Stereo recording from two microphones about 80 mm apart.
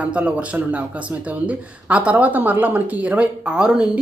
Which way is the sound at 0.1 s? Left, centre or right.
Centre.